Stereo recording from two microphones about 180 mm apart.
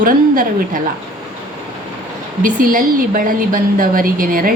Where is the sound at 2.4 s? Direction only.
50° right (ahead or behind).